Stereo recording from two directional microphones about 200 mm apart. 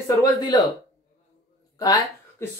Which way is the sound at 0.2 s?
20° left (ahead or behind).